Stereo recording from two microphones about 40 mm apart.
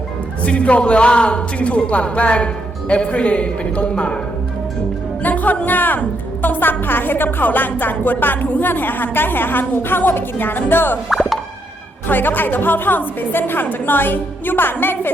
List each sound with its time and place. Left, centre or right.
0.4 s a man's voice: left
5.2 s music: left
5.6 s a woman's voice: left
11.1 s plop: centre
12.0 s a woman's voice: left